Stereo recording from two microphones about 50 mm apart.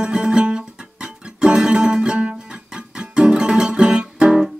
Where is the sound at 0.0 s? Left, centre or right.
Centre.